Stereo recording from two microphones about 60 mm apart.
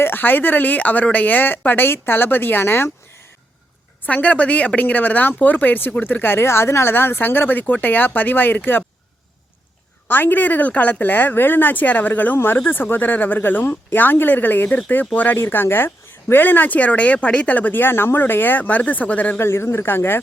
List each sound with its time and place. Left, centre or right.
0.0 s speech: left
4.0 s speech: left
10.1 s speech: left
19.4 s speech: left